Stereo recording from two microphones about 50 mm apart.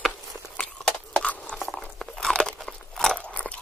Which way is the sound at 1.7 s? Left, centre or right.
Centre.